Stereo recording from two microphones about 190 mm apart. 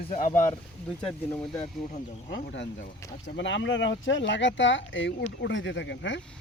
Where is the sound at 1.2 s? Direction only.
20° left (ahead or behind).